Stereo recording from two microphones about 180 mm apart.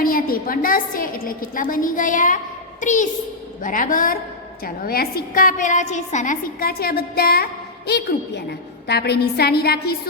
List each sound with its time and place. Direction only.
0.0 s a woman's voice: 50° left (ahead or behind)